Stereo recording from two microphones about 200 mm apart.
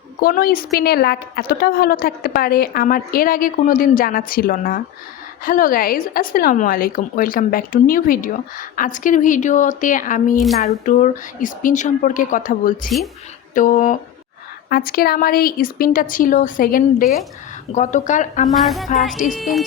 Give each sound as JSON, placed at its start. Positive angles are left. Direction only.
{"t": 0.2, "sound": "speech", "side_deg": 45}
{"t": 18.4, "sound": "speech", "side_deg": 0}
{"t": 19.1, "sound": "speech", "side_deg": 40}
{"t": 19.4, "sound": "speech", "side_deg": 0}